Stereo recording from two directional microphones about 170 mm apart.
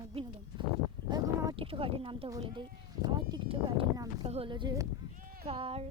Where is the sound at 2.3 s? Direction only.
20° right (ahead or behind).